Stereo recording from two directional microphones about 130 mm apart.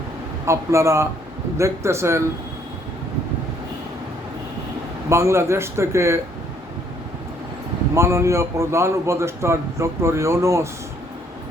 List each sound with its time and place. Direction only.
0.4 s a man's voice: 20° right (ahead or behind)
5.0 s a man's voice: 20° right (ahead or behind)
7.9 s a man's voice: 20° right (ahead or behind)